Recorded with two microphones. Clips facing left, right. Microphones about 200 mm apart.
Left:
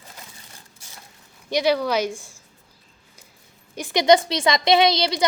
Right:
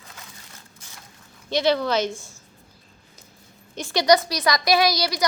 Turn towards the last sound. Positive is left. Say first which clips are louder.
# left 3 dB
turn(degrees=25)  # may be behind; listen again after turning